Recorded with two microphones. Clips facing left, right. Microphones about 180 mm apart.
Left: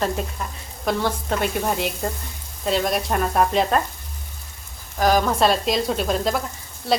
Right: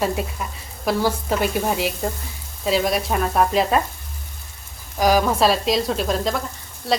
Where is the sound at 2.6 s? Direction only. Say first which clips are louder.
Right 2 dB; centre (ahead or behind).